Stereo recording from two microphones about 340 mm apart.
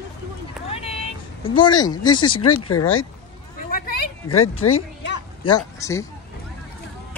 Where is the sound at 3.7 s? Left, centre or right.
Left.